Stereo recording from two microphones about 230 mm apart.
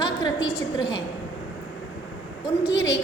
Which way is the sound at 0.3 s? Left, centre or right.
Centre.